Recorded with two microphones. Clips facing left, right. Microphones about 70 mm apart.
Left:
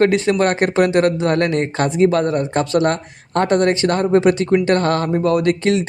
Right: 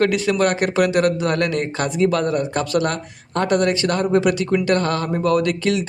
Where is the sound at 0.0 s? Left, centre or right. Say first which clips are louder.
Left 3 dB; left.